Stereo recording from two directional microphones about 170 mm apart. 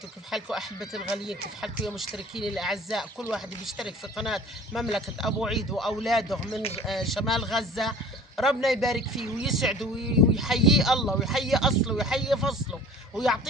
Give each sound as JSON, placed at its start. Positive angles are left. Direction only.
{"t": 0.3, "sound": "speech", "side_deg": 0}
{"t": 6.6, "sound": "speech", "side_deg": 35}
{"t": 6.8, "sound": "speech", "side_deg": 0}